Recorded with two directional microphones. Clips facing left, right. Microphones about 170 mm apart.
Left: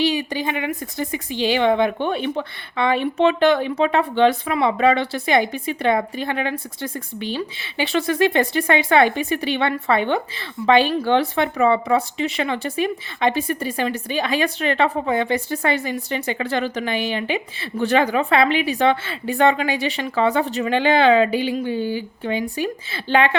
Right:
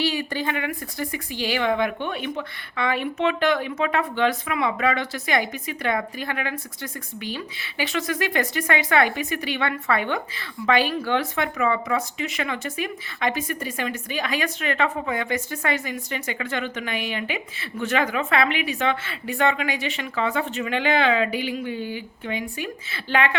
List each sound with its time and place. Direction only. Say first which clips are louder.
0.0 s speech: left 4 dB; 20° left (ahead or behind)